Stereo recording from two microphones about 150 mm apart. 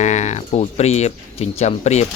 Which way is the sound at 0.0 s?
50° left (ahead or behind).